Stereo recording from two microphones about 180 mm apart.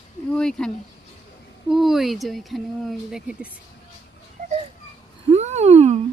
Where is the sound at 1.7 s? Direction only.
Centre (ahead or behind).